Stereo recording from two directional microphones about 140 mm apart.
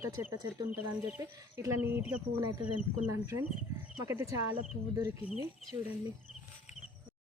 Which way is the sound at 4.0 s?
20° right (ahead or behind).